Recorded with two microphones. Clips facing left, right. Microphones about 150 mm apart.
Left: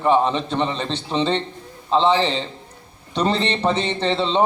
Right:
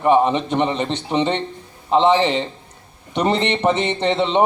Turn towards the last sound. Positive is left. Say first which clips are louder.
# right 2 dB
turn(degrees=-15)  # may be behind; listen again after turning